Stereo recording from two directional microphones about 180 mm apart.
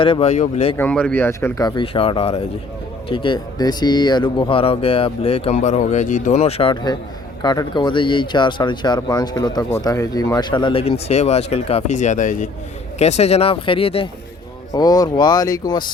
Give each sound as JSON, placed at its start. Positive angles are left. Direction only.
{"t": 0.0, "sound": "speech", "side_deg": 30}
{"t": 0.8, "sound": "speech", "side_deg": 5}
{"t": 14.7, "sound": "speech", "side_deg": 20}